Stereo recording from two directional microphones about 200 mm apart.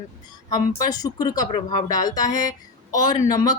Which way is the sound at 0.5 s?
20° left (ahead or behind).